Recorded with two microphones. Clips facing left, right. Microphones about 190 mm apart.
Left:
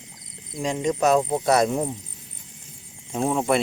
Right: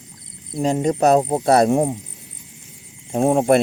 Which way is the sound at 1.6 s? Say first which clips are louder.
Right 7 dB; 45° right (ahead or behind).